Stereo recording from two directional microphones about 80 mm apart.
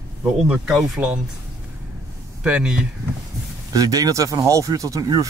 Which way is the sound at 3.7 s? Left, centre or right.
Right.